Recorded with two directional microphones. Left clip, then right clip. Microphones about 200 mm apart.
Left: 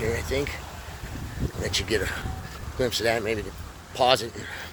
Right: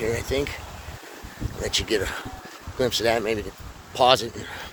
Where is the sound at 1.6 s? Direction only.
30° right (ahead or behind).